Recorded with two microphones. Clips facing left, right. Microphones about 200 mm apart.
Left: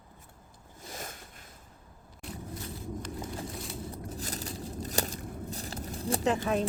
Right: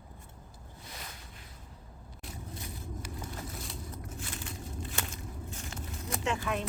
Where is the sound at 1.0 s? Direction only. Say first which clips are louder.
Left 5 dB; 45° left (ahead or behind).